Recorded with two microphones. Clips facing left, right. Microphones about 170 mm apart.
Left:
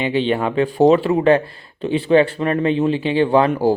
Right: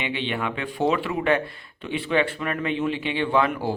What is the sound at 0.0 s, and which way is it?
Speech, 35° left (ahead or behind).